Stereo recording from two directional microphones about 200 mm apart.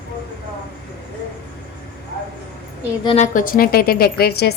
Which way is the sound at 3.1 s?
35° left (ahead or behind).